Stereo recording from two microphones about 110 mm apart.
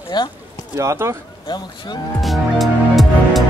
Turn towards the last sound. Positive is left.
turn(degrees=0)  # may be behind; listen again after turning